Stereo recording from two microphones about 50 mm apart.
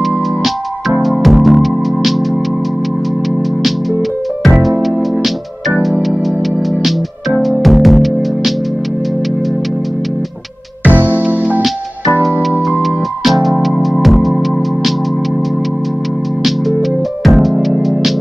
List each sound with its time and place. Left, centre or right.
1.0 s music: centre
4.4 s music: centre
7.4 s music: centre
10.8 s music: right
11.2 s music: right
12.1 s music: right
13.2 s music: centre
17.2 s music: centre